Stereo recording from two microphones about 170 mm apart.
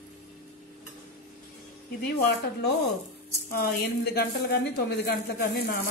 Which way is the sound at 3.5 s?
65° left (ahead or behind).